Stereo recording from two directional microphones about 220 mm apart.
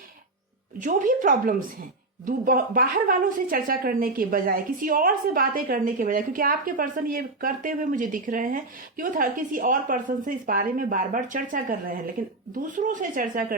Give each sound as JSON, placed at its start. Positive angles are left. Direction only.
{"t": 0.8, "sound": "a woman's voice", "side_deg": -35}